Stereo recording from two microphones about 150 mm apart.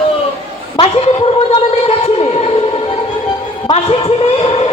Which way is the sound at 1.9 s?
45° left (ahead or behind).